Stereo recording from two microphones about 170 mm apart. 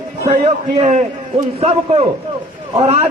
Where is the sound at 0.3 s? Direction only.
40° right (ahead or behind).